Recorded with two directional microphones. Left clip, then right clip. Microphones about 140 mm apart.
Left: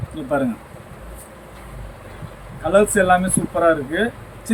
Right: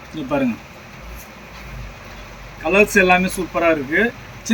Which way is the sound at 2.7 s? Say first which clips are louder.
Right 1 dB; 25° left (ahead or behind).